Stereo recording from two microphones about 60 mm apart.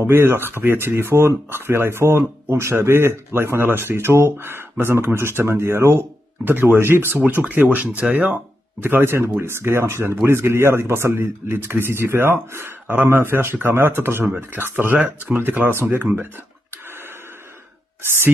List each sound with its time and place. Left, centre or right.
0.0 s speech: right
6.4 s speech: right